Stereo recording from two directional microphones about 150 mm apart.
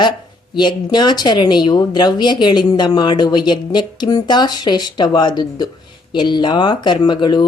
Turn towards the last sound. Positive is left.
turn(degrees=30)  # may be behind; listen again after turning